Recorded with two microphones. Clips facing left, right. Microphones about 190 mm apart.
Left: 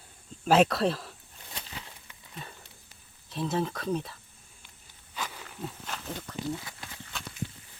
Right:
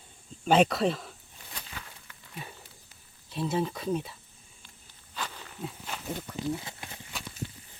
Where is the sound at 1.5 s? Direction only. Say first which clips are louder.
Left 1 dB; 25° left (ahead or behind).